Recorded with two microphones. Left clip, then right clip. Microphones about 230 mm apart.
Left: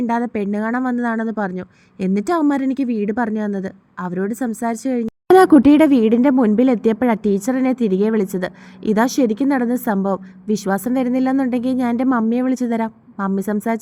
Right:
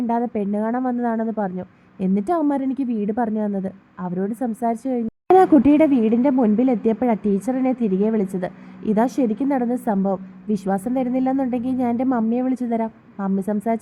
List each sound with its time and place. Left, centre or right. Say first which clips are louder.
0.1 s a woman's voice: left 2 dB; centre